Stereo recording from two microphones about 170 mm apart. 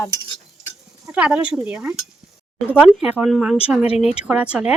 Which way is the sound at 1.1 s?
5° right (ahead or behind).